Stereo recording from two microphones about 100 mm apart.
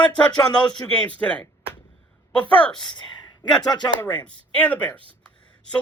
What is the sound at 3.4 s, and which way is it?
Speech, 45° left (ahead or behind).